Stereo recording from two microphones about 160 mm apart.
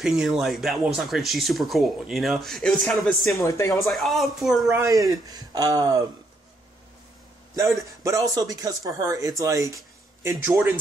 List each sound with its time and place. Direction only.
0.0 s speech: 5° right (ahead or behind)
3.3 s speech: 20° left (ahead or behind)
3.8 s speech: centre (ahead or behind)
4.6 s speech: 20° right (ahead or behind)
8.0 s speech: 20° right (ahead or behind)